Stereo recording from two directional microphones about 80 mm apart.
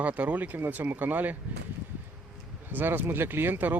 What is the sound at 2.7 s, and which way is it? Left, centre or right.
Speech, right.